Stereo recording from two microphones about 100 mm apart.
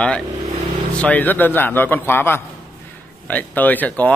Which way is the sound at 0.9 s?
15° left (ahead or behind).